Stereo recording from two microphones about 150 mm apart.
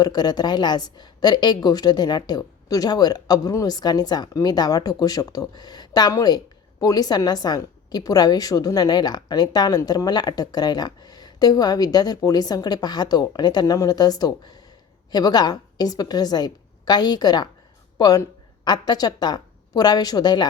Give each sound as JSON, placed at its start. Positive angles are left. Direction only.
{"t": 0.0, "sound": "a woman's voice", "side_deg": 30}